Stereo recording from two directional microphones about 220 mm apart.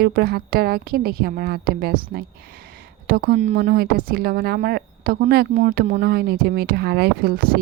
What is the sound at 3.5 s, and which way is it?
A woman's voice, 45° right (ahead or behind).